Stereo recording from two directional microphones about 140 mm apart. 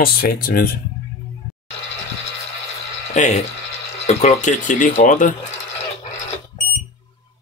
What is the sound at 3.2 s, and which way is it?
Speech, 60° left (ahead or behind).